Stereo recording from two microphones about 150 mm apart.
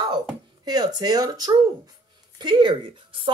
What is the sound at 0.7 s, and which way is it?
Speech, 25° right (ahead or behind).